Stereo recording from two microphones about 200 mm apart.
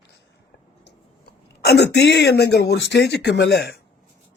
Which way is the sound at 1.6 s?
55° left (ahead or behind).